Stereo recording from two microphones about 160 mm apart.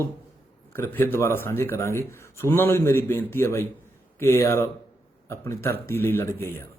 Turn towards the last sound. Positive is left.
turn(degrees=15)  # may be behind; listen again after turning